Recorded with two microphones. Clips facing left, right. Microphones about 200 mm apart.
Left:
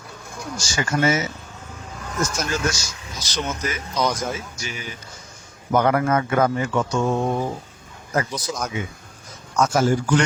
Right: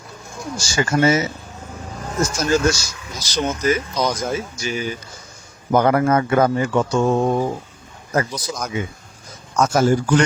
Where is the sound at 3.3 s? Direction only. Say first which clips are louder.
Right 8 dB; 35° right (ahead or behind).